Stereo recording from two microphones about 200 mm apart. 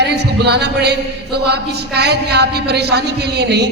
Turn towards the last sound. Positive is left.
turn(degrees=-55)  # may be behind; listen again after turning